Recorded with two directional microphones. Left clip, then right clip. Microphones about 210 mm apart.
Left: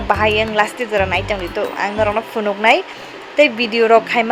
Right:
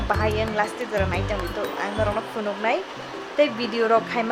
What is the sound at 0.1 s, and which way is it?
Speech, 20° left (ahead or behind).